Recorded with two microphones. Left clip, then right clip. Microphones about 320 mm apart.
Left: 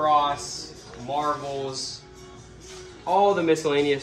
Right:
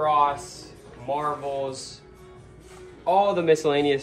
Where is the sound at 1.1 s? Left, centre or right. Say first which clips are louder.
Even; right.